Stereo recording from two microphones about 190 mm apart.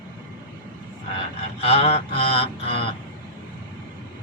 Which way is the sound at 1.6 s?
30° left (ahead or behind).